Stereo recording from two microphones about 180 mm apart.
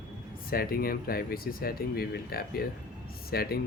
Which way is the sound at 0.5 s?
55° left (ahead or behind).